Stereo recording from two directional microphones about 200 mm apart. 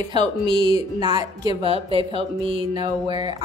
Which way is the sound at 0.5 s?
25° right (ahead or behind).